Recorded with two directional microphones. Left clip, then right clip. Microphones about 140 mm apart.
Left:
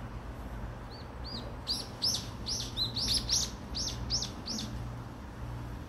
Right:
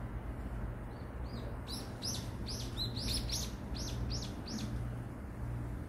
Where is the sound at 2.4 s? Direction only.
20° right (ahead or behind).